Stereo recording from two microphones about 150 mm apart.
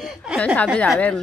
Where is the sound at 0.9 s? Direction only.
10° left (ahead or behind).